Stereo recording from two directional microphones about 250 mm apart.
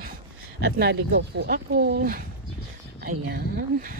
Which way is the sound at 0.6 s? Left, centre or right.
Right.